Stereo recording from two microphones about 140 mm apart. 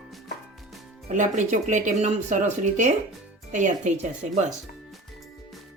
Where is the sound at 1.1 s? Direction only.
60° right (ahead or behind).